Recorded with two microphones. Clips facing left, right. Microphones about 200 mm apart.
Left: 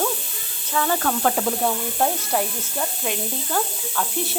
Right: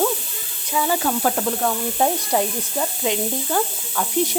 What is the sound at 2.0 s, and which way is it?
A woman's voice, 10° right (ahead or behind).